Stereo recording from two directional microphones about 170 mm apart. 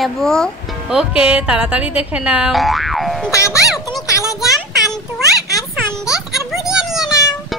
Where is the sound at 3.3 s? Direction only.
15° left (ahead or behind).